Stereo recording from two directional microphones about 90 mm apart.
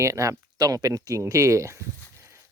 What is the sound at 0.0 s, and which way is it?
Speech, 35° right (ahead or behind).